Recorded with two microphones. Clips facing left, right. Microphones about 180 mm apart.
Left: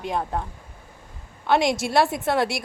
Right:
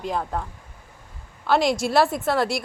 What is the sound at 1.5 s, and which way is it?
Speech, centre (ahead or behind).